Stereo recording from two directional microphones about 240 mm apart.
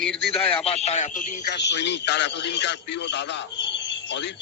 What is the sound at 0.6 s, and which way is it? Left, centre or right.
Speech, left.